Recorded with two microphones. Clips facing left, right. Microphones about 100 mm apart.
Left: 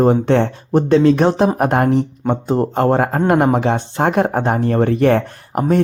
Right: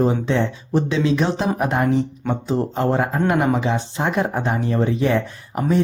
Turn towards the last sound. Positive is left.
turn(degrees=55)  # may be behind; listen again after turning